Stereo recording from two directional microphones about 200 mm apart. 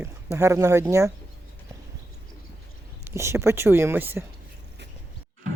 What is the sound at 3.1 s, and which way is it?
Speech, 15° right (ahead or behind).